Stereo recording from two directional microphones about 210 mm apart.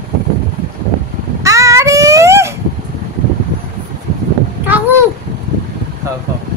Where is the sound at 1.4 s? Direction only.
15° right (ahead or behind).